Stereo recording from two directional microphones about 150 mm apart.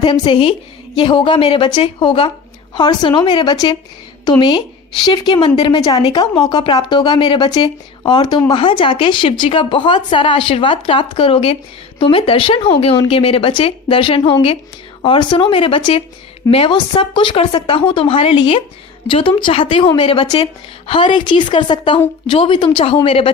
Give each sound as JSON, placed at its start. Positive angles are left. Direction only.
{"t": 0.0, "sound": "a woman's voice", "side_deg": 35}